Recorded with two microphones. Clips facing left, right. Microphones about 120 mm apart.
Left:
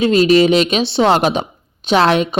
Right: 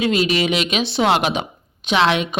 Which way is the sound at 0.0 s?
35° left (ahead or behind).